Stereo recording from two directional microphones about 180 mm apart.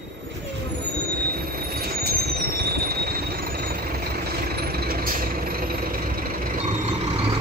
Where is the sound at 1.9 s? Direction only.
55° right (ahead or behind).